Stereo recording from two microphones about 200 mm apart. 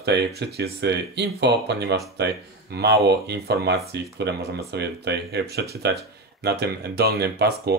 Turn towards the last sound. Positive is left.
turn(degrees=-55)  # may be behind; listen again after turning